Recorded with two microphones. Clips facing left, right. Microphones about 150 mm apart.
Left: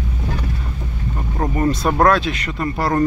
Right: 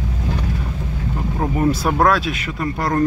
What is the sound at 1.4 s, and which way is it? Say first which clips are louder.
Speech: even; 5° right (ahead or behind).